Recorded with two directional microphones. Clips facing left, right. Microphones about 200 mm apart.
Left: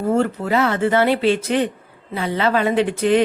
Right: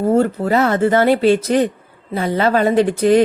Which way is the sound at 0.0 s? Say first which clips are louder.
Right 4 dB; 40° right (ahead or behind).